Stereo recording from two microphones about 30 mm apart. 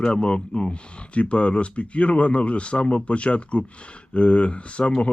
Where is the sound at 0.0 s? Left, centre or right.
Left.